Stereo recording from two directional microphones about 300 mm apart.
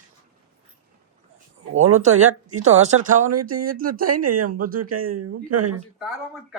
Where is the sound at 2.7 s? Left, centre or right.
Right.